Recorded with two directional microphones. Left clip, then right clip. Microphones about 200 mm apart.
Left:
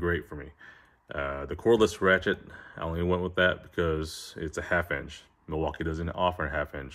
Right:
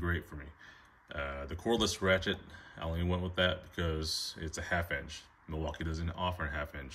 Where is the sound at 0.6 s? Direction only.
10° left (ahead or behind).